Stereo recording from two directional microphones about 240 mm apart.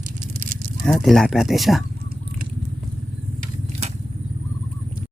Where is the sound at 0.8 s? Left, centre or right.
Centre.